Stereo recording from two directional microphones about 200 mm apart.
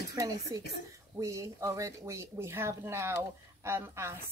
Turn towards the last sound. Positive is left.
turn(degrees=-10)  # may be behind; listen again after turning